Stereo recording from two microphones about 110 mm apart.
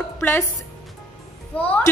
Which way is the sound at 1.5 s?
15° left (ahead or behind).